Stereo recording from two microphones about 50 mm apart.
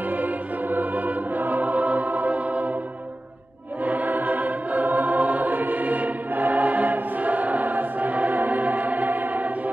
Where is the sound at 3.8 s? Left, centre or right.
Right.